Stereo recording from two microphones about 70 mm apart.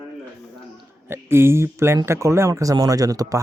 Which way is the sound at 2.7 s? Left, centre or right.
Right.